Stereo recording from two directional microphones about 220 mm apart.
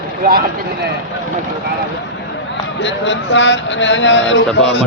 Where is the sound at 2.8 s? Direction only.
55° left (ahead or behind).